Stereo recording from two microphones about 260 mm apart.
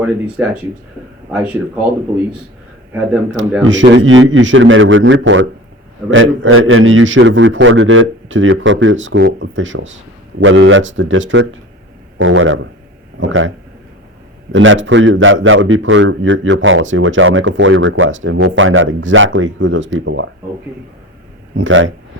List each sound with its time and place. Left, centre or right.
0.0 s speech: centre
3.6 s a man's voice: right
14.5 s a man's voice: right
21.5 s a man's voice: right